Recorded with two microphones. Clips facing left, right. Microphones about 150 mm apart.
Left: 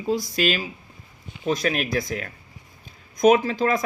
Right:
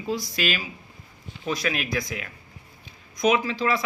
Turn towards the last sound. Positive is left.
turn(degrees=45)  # may be behind; listen again after turning